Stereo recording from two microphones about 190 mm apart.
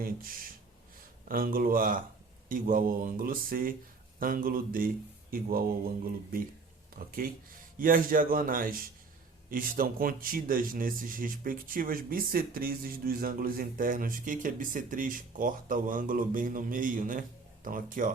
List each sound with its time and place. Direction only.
0.0 s speech: 50° right (ahead or behind)
7.0 s speech: 50° right (ahead or behind)